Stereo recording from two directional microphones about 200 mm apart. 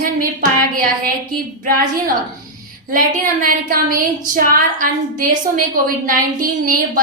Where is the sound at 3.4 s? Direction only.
45° right (ahead or behind).